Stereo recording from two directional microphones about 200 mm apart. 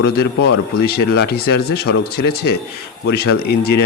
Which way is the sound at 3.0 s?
55° left (ahead or behind).